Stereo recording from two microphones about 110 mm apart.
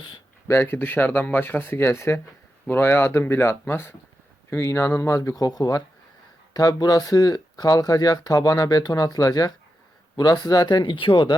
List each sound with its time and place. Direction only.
0.4 s speech: 20° left (ahead or behind); by 11.3 s 45° left (ahead or behind)